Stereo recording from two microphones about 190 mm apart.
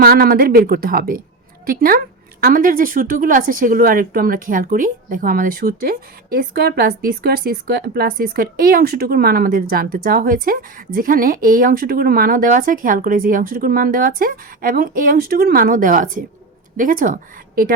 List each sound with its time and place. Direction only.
0.0 s speech: 50° right (ahead or behind)